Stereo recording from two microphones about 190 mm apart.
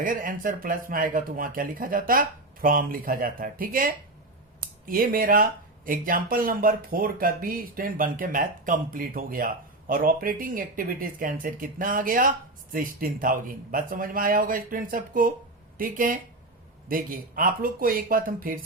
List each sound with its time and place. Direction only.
0.0 s speech: 45° right (ahead or behind)